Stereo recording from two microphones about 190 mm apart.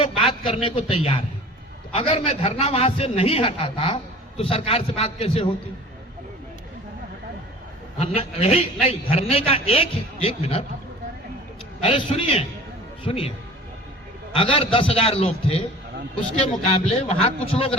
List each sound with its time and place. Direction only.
0.0 s a man's voice: 30° left (ahead or behind)
7.9 s a man's voice: 30° left (ahead or behind)
11.8 s a man's voice: 30° left (ahead or behind)
14.3 s a man's voice: 30° left (ahead or behind)
16.6 s a man's voice: 30° left (ahead or behind)